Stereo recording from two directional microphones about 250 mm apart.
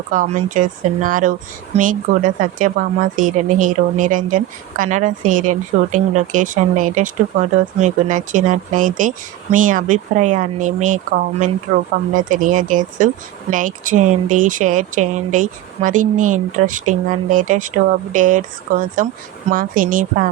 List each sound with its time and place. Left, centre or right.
0.1 s speech: right